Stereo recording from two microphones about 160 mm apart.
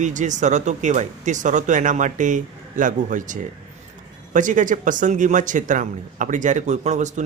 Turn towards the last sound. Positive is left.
turn(degrees=-50)  # may be behind; listen again after turning